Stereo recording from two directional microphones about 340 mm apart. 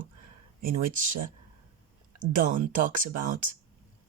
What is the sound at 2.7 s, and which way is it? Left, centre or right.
Speech, right.